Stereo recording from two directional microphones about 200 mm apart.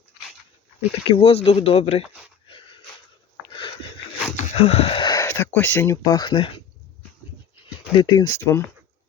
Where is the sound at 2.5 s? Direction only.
25° left (ahead or behind).